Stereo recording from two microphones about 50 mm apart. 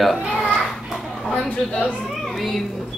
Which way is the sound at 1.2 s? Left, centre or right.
Centre.